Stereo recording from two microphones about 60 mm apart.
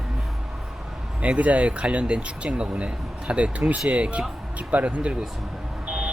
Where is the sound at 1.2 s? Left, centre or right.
Right.